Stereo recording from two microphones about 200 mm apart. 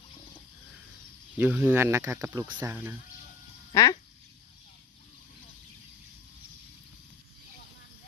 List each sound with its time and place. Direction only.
1.4 s speech: 10° right (ahead or behind)
3.7 s speech: 20° left (ahead or behind)